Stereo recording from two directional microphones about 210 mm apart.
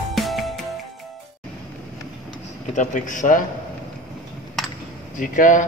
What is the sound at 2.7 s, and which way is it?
Speech, 35° left (ahead or behind).